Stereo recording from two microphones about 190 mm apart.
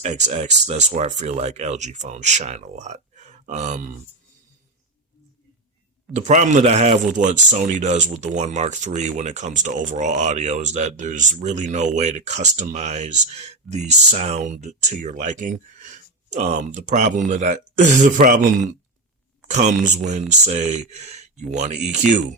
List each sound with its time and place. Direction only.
0.0 s speech: 35° right (ahead or behind)
6.1 s speech: 40° right (ahead or behind)